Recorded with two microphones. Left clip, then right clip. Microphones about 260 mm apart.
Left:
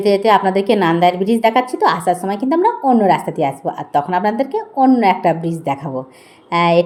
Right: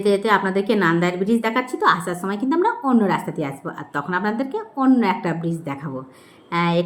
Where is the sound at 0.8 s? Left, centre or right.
Centre.